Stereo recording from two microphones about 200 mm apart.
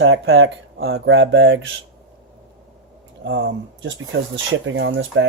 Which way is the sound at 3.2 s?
60° right (ahead or behind).